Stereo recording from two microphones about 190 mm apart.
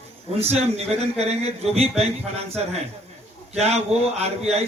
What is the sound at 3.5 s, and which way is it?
A man's voice, 35° right (ahead or behind).